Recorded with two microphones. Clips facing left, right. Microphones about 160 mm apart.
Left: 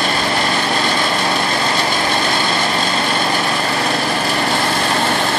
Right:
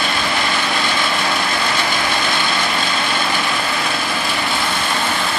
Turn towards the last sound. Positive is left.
turn(degrees=40)  # may be behind; listen again after turning